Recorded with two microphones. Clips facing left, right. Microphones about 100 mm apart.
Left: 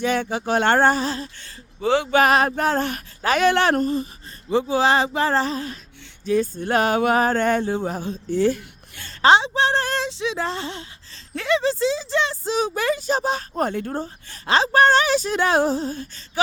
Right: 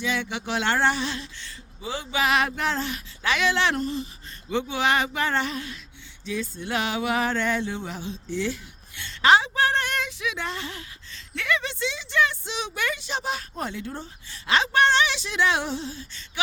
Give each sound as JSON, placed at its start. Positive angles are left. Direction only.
{"t": 0.0, "sound": "speech", "side_deg": 50}
{"t": 1.8, "sound": "speech", "side_deg": 70}
{"t": 2.1, "sound": "speech", "side_deg": 45}
{"t": 9.3, "sound": "speech", "side_deg": 25}